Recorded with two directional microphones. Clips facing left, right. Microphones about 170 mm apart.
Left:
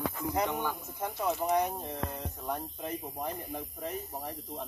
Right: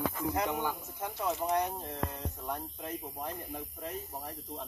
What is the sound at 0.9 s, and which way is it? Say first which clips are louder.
Speech: left 4 dB; 10° left (ahead or behind).